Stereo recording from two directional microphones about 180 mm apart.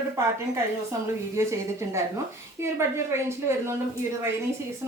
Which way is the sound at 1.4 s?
15° right (ahead or behind).